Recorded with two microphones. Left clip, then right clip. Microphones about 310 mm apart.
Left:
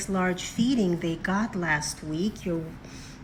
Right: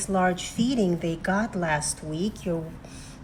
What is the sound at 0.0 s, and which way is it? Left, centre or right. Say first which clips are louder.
A woman's voice: right 4 dB; centre.